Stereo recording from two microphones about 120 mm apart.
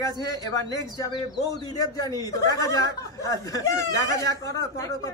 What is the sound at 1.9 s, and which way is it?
Speech, 30° left (ahead or behind).